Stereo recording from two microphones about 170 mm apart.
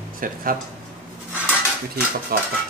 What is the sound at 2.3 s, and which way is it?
Speech, 60° right (ahead or behind).